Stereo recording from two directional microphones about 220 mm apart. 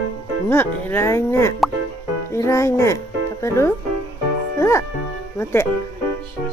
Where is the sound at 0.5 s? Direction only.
10° left (ahead or behind).